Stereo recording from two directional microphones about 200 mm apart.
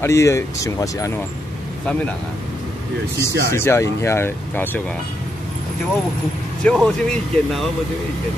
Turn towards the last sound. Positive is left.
turn(degrees=0)  # may be behind; listen again after turning